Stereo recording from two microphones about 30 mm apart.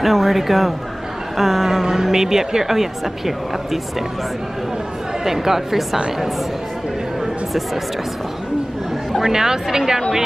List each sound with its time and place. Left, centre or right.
0.0 s a woman's voice: centre
5.2 s a woman's voice: centre
9.2 s a woman's voice: centre